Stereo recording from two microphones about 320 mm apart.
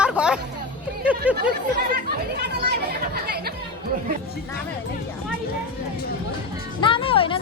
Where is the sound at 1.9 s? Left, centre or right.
Right.